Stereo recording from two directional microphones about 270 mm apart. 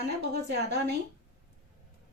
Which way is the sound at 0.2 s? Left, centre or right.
Right.